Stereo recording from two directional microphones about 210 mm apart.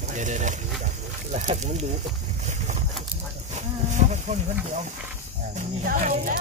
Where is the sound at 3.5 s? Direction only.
35° right (ahead or behind).